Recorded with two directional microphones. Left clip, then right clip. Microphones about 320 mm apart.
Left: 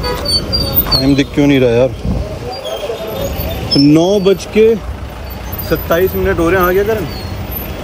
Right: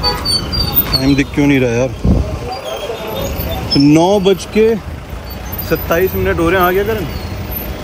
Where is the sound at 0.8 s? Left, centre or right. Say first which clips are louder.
Left 2 dB; centre.